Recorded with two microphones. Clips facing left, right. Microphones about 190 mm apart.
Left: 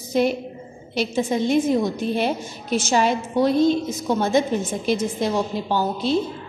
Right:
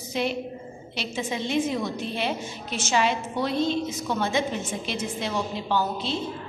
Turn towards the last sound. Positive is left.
turn(degrees=40)  # may be behind; listen again after turning